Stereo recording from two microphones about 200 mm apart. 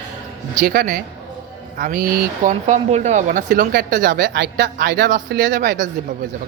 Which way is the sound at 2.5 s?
35° right (ahead or behind).